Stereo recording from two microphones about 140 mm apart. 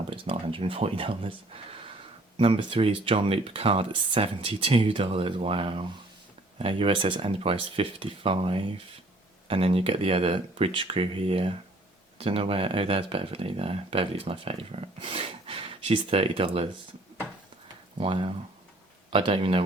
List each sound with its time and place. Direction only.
0.1 s speech: 40° right (ahead or behind)
17.9 s speech: 40° right (ahead or behind)